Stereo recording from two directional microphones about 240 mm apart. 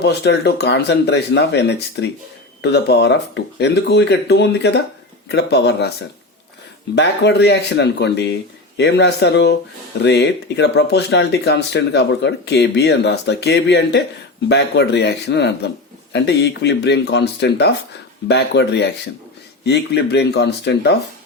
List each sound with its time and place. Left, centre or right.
0.0 s speech: left
6.9 s speech: left